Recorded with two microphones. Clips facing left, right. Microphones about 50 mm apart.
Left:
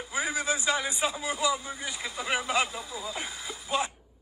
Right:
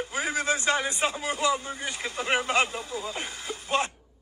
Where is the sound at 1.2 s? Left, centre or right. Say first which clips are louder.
Right 2 dB; right.